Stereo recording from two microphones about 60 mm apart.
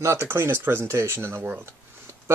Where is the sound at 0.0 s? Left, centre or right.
Right.